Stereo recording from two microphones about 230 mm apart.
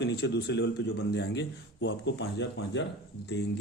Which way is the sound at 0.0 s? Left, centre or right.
Left.